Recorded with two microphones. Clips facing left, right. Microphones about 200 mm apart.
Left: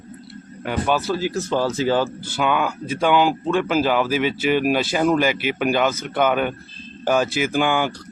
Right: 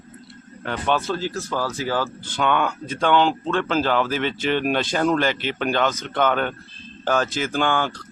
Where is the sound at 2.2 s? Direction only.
5° left (ahead or behind).